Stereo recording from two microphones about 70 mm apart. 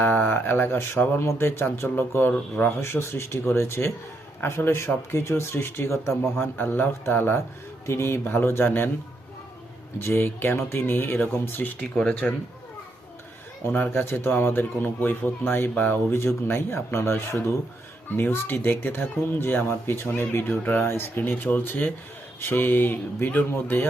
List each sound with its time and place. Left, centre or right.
0.0 s speech: left
2.3 s speech: left
2.8 s speech: left
10.0 s speech: left
12.2 s speech: centre
13.9 s speech: left
16.1 s speech: left